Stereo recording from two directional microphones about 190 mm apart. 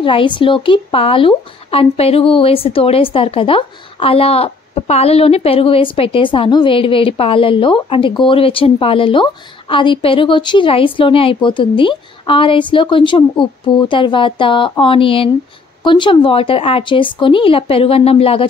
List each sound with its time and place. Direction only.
0.0 s speech: 25° left (ahead or behind)